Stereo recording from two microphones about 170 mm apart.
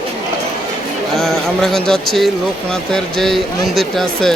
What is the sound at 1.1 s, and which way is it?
Speech, centre (ahead or behind).